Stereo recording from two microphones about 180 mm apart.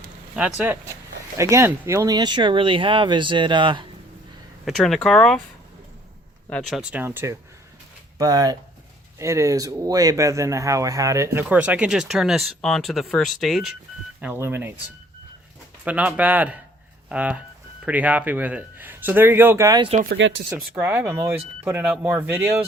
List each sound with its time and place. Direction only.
0.3 s speech: 5° right (ahead or behind); by 3.8 s 25° right (ahead or behind)
4.6 s speech: centre (ahead or behind)
6.5 s speech: 5° left (ahead or behind)
6.9 s speech: 10° right (ahead or behind)
14.2 s speech: 10° right (ahead or behind)
15.8 s speech: 5° right (ahead or behind)
20.1 s speech: 90° right
20.7 s speech: 10° right (ahead or behind)